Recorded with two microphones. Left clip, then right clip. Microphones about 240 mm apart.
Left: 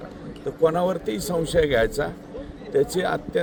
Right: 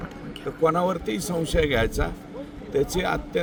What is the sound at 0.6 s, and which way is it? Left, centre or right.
A man's voice, centre.